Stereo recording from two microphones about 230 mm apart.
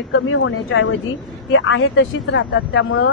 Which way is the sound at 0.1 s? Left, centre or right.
Left.